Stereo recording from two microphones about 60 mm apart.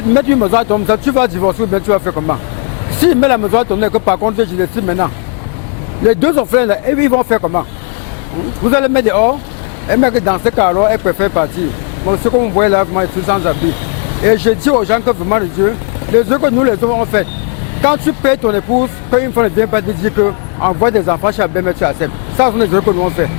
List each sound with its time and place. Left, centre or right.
0.1 s speech: left
8.6 s speech: left